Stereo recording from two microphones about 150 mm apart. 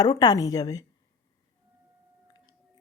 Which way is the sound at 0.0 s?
25° left (ahead or behind).